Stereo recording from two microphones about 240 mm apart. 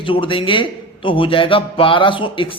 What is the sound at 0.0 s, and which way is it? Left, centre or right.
Speech, left.